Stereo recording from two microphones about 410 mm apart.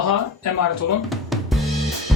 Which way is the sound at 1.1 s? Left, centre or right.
Centre.